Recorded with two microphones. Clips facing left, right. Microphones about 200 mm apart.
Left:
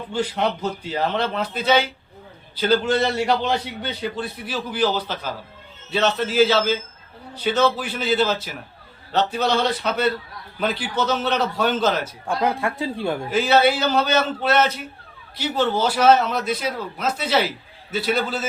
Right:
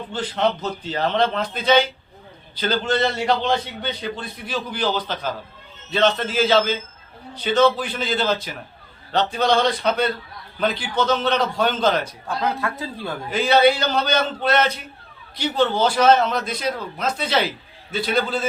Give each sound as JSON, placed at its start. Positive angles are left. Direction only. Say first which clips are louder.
{"t": 0.1, "sound": "a man's voice", "louder": "even", "side_deg": 10}
{"t": 12.6, "sound": "a man's voice", "louder": "left 4 dB", "side_deg": 15}
{"t": 13.3, "sound": "a man's voice", "louder": "right 2 dB", "side_deg": 5}